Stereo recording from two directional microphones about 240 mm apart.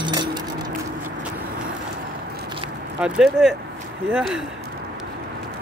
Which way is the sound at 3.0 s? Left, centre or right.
Centre.